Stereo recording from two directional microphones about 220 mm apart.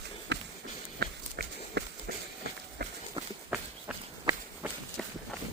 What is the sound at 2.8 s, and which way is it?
Clip-clop, 45° right (ahead or behind).